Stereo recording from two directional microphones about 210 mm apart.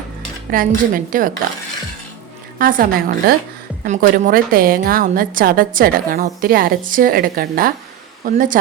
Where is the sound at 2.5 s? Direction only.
45° right (ahead or behind).